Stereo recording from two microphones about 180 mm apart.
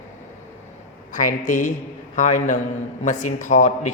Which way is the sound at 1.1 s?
45° left (ahead or behind).